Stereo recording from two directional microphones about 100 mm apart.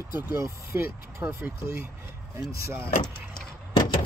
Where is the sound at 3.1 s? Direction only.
5° left (ahead or behind).